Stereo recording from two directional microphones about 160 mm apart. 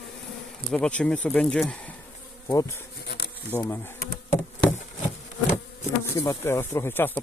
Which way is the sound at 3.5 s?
15° left (ahead or behind).